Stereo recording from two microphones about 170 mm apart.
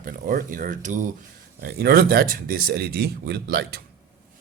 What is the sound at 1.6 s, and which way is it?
Speech, 70° right (ahead or behind).